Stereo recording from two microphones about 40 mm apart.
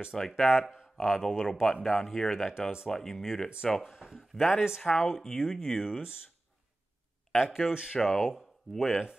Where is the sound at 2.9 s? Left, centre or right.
Centre.